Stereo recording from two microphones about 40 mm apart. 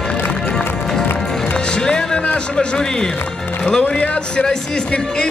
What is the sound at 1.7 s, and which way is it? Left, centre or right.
Music, centre.